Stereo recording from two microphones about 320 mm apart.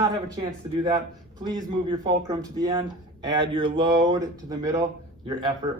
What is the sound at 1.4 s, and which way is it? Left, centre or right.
Speech, centre.